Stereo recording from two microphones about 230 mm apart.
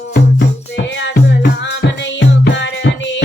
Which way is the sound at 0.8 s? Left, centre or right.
Left.